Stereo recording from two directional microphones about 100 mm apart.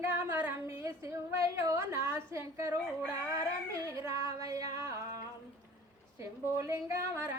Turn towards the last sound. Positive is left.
turn(degrees=-25)  # may be behind; listen again after turning